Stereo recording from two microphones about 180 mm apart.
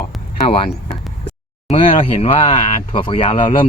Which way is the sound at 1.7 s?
30° left (ahead or behind).